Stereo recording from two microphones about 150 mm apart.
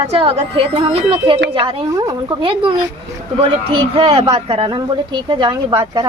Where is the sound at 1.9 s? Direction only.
20° right (ahead or behind).